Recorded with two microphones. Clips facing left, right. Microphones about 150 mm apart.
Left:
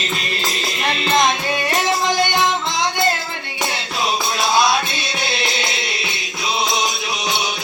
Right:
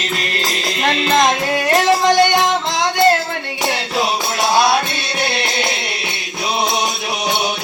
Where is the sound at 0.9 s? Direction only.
80° right.